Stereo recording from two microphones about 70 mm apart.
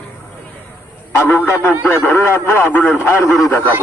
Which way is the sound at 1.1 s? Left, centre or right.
Left.